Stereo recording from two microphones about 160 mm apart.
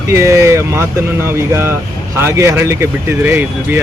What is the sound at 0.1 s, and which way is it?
Speech, 15° right (ahead or behind).